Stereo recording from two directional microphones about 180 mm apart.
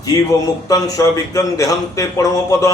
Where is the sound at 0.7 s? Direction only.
20° left (ahead or behind).